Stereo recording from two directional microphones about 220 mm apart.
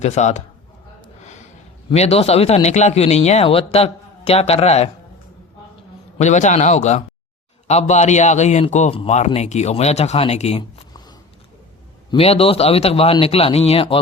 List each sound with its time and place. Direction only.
0.0 s a man's voice: 30° left (ahead or behind)
1.2 s snort: 30° left (ahead or behind)
1.9 s speech: 25° left (ahead or behind)
6.1 s a man's voice: 30° left (ahead or behind)
12.1 s speech: 25° left (ahead or behind)